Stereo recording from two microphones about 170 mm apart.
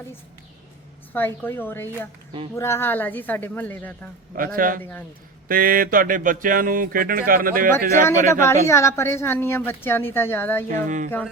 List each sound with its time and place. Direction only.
1.1 s a woman's voice: 10° left (ahead or behind)
4.4 s speech: 55° right (ahead or behind)
4.8 s a woman's voice: 10° left (ahead or behind)
5.5 s speech: 55° right (ahead or behind)
8.0 s a woman's voice: 15° left (ahead or behind)
10.8 s a sound: 45° right (ahead or behind)